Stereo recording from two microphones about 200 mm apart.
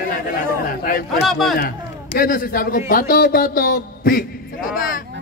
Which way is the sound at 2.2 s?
45° left (ahead or behind).